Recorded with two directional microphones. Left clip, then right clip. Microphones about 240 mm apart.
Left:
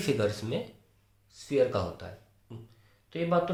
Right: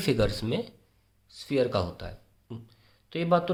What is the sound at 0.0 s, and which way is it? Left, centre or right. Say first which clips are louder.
Speech: right 2 dB; right.